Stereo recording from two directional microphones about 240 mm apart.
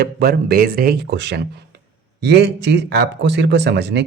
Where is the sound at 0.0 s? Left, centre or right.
Right.